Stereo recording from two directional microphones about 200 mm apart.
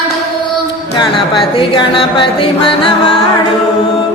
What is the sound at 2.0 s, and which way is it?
Music, 25° left (ahead or behind).